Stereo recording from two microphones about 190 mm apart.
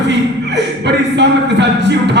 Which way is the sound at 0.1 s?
65° right (ahead or behind).